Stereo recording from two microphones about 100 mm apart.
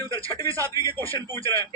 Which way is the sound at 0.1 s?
30° right (ahead or behind).